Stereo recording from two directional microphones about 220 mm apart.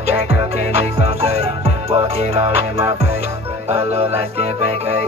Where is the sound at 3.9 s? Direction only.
25° right (ahead or behind).